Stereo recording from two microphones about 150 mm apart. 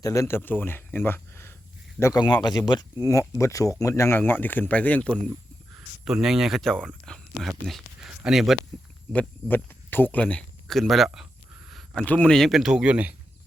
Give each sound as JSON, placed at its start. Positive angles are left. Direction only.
{"t": 0.0, "sound": "speech", "side_deg": 20}
{"t": 2.2, "sound": "speech", "side_deg": 30}
{"t": 6.1, "sound": "speech", "side_deg": -5}
{"t": 9.1, "sound": "speech", "side_deg": 10}
{"t": 11.7, "sound": "a sound", "side_deg": 0}
{"t": 12.0, "sound": "speech", "side_deg": 10}